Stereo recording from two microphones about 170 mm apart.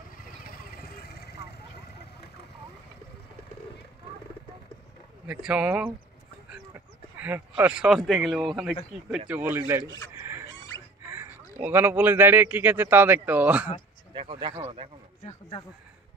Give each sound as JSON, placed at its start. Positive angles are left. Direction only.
{"t": 0.2, "sound": "vehicle", "side_deg": 60}
{"t": 5.2, "sound": "speech", "side_deg": -5}
{"t": 7.2, "sound": "speech", "side_deg": -10}
{"t": 11.1, "sound": "speech", "side_deg": -15}
{"t": 14.1, "sound": "speech", "side_deg": -30}